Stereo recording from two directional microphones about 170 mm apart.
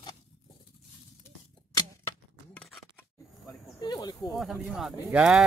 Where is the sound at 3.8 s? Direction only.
25° left (ahead or behind).